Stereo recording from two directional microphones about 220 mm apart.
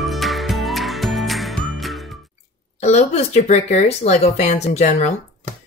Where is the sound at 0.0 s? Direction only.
Centre (ahead or behind).